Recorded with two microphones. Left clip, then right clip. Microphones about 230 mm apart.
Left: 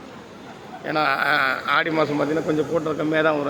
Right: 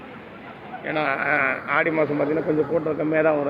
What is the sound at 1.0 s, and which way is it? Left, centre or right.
Speech, left.